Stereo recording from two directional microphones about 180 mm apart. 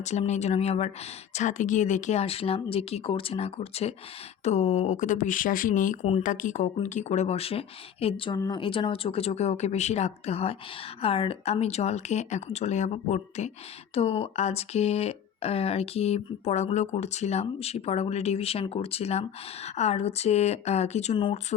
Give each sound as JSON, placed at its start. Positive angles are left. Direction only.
{"t": 0.0, "sound": "speech", "side_deg": 40}